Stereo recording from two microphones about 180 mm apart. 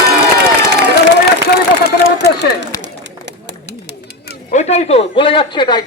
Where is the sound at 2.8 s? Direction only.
75° right (ahead or behind).